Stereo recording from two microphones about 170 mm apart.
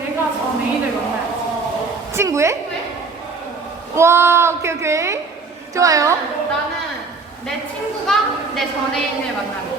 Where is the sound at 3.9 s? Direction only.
15° right (ahead or behind).